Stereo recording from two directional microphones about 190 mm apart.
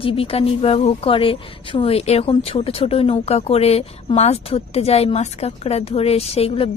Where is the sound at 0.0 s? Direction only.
30° left (ahead or behind).